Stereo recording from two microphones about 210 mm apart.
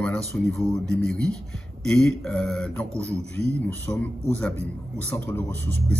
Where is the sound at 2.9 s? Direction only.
30° right (ahead or behind).